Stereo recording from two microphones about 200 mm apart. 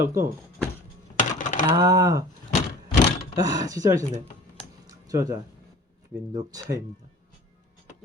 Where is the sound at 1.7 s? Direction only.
20° right (ahead or behind).